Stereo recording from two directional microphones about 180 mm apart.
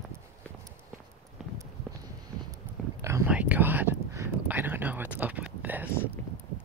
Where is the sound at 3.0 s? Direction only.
10° right (ahead or behind).